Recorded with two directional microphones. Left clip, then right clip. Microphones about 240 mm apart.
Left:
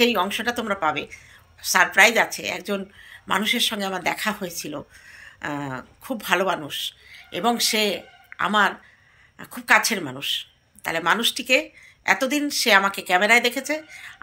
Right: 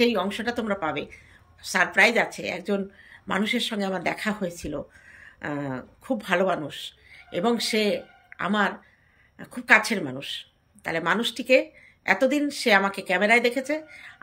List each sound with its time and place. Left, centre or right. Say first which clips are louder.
0.0 s a woman's voice: left 3 dB; centre